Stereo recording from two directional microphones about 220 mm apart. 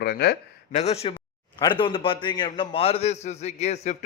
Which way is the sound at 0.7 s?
30° left (ahead or behind).